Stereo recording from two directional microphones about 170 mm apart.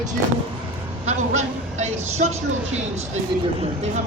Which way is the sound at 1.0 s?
40° right (ahead or behind).